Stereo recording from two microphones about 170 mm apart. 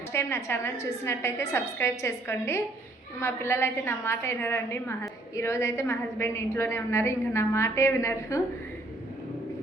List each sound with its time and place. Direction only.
0.1 s a woman's voice: 15° left (ahead or behind)